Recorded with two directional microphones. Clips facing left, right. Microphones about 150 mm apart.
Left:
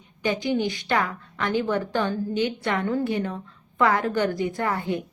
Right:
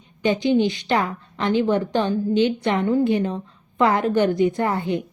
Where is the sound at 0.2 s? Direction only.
20° right (ahead or behind).